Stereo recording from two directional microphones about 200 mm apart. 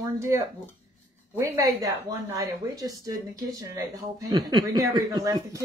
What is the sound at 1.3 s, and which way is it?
Speech, 15° right (ahead or behind).